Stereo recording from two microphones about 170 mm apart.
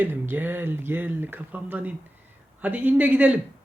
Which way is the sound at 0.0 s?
10° right (ahead or behind).